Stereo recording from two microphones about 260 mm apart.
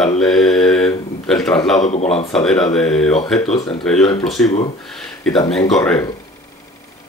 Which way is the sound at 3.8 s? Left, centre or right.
Centre.